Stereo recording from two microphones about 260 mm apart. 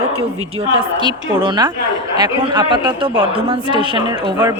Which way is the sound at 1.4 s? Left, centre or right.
Centre.